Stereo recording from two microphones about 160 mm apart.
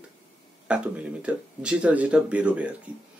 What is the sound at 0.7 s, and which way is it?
Speech, 5° right (ahead or behind).